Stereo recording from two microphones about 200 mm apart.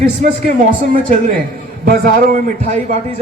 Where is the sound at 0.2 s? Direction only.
40° right (ahead or behind).